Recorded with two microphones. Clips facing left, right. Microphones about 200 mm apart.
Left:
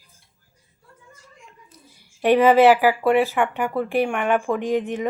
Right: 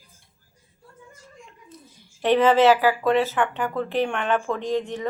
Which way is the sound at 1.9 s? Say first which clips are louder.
Left 3 dB; 10° left (ahead or behind).